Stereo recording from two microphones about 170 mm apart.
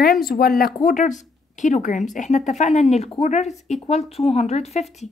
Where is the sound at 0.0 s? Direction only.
60° left (ahead or behind).